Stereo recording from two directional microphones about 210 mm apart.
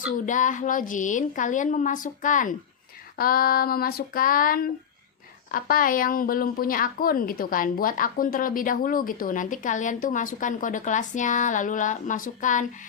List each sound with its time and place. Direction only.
0.3 s a woman's voice: 35° left (ahead or behind)